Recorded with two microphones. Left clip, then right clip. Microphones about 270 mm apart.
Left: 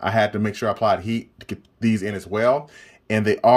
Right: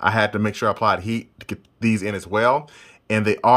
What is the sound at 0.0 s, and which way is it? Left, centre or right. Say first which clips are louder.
Speech: right 1 dB; centre.